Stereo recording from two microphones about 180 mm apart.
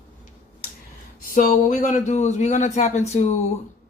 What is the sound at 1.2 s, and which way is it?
A man's voice, 50° left (ahead or behind).